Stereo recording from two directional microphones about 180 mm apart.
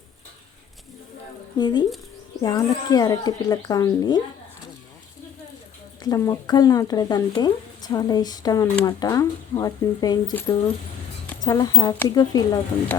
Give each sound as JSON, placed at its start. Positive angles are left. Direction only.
{"t": 1.5, "sound": "speech", "side_deg": 25}
{"t": 6.0, "sound": "speech", "side_deg": 20}
{"t": 11.4, "sound": "speech", "side_deg": 20}